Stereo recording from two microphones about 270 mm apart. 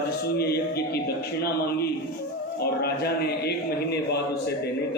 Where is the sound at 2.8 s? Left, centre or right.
Left.